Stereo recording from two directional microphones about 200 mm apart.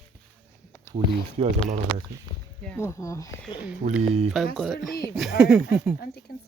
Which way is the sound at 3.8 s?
40° right (ahead or behind).